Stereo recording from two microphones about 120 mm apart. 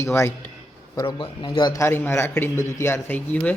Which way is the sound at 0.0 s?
20° left (ahead or behind).